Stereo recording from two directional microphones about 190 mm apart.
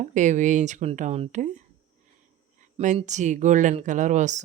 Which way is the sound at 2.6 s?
40° right (ahead or behind).